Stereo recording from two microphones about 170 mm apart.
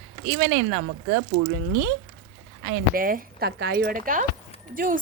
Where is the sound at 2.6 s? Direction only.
75° right (ahead or behind).